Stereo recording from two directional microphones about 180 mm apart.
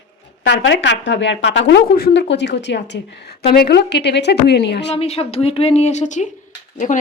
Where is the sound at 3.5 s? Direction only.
60° left (ahead or behind).